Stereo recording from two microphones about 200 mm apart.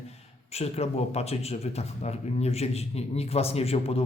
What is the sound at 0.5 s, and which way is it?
Speech, 30° left (ahead or behind).